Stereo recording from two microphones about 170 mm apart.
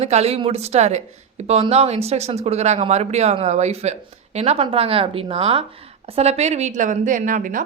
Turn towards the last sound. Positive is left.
turn(degrees=-50)  # may be behind; listen again after turning